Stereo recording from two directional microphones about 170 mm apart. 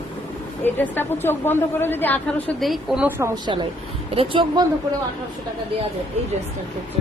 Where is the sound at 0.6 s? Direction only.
10° left (ahead or behind).